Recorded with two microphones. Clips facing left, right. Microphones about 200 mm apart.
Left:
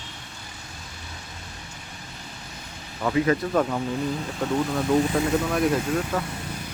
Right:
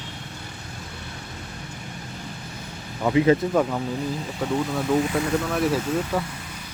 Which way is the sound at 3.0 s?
15° right (ahead or behind).